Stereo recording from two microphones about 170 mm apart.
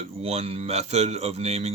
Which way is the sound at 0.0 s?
35° right (ahead or behind).